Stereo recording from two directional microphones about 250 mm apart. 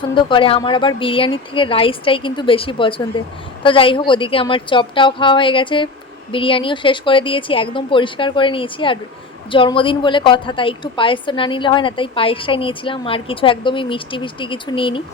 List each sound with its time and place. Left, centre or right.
0.2 s a woman's voice: centre